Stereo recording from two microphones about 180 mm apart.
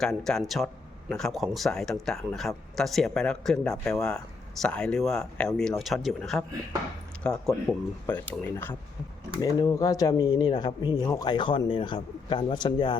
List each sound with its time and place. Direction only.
0.0 s a man's voice: 5° left (ahead or behind); by 13.0 s 25° left (ahead or behind)